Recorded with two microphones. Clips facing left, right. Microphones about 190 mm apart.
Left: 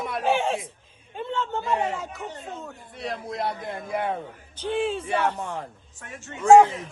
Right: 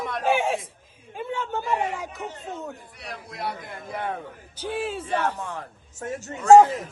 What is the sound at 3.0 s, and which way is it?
Speech, 25° left (ahead or behind).